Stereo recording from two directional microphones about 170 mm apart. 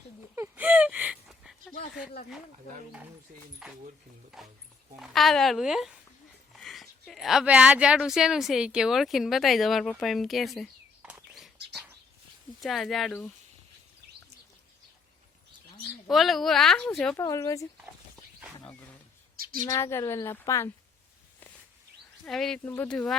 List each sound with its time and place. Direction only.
0.3 s gasp: 10° right (ahead or behind)
4.9 s speech: centre (ahead or behind)
12.5 s speech: centre (ahead or behind)
16.0 s speech: centre (ahead or behind)
17.2 s speech: 20° left (ahead or behind)
18.2 s wild animals: centre (ahead or behind)
19.6 s a woman's voice: 15° left (ahead or behind)
22.3 s speech: 5° left (ahead or behind)